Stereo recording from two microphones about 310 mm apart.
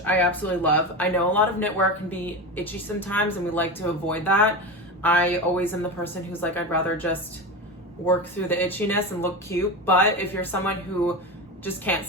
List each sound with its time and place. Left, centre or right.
0.0 s speech: centre